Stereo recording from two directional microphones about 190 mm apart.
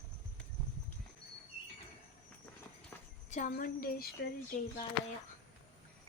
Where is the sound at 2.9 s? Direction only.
15° left (ahead or behind).